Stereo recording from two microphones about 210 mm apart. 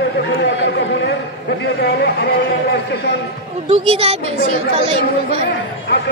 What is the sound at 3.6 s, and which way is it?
A woman's voice, 30° right (ahead or behind).